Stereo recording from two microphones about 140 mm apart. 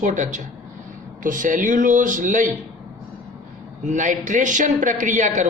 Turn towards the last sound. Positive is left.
turn(degrees=-65)  # may be behind; listen again after turning